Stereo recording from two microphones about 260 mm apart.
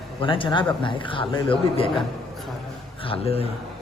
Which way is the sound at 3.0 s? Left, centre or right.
Left.